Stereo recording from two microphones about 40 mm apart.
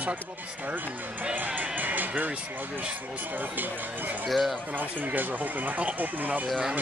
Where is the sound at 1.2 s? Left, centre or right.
Right.